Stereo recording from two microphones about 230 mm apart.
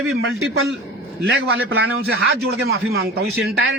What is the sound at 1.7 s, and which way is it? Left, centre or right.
A man's voice, right.